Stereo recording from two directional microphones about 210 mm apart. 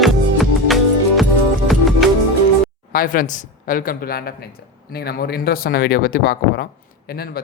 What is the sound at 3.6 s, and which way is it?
Speech, 45° left (ahead or behind).